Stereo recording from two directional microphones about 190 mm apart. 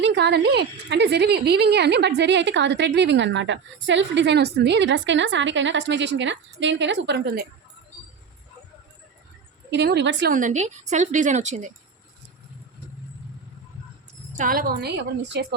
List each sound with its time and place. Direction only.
0.0 s speech: 65° right (ahead or behind)
9.6 s a woman's voice: 60° right (ahead or behind)
10.3 s a woman's voice: 40° right (ahead or behind)
14.3 s a woman's voice: 45° right (ahead or behind)